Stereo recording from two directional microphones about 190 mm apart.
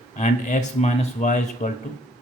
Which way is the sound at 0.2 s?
40° left (ahead or behind).